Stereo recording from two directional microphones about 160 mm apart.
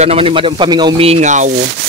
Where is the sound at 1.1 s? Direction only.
45° right (ahead or behind).